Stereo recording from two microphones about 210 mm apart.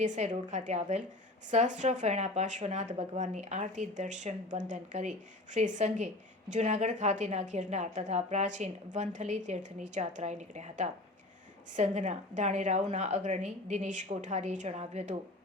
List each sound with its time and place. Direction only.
0.0 s speech: 35° right (ahead or behind)